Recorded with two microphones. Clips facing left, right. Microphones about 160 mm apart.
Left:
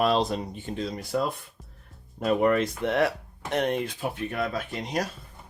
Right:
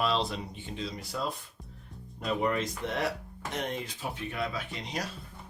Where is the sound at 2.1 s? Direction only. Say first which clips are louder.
Left 7 dB; 55° left (ahead or behind).